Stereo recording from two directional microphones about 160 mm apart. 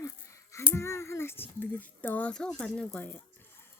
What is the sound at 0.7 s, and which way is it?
Child singing, 15° left (ahead or behind).